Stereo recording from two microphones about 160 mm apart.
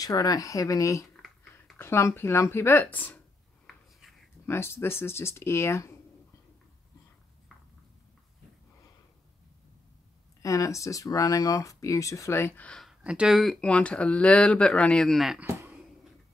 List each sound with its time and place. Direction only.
0.0 s speech: 25° left (ahead or behind)
1.1 s typing: centre (ahead or behind)
1.8 s speech: 15° left (ahead or behind)
4.5 s speech: 15° left (ahead or behind)
10.4 s speech: 20° left (ahead or behind)
13.0 s speech: 5° right (ahead or behind)